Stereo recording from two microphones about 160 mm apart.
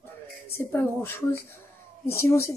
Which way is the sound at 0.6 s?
15° left (ahead or behind).